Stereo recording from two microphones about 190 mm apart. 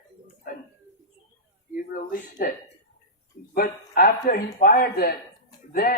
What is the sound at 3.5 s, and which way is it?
Speech, 50° left (ahead or behind).